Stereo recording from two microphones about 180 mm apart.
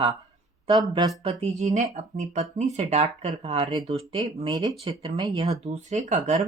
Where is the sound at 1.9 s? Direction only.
40° right (ahead or behind).